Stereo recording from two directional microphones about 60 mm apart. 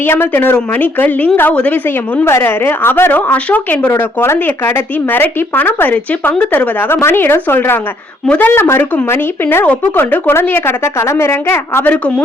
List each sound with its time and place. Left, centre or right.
0.0 s a woman's voice: left
2.4 s speech: left
3.1 s speech: left
9.6 s speech: left
11.9 s a woman's voice: centre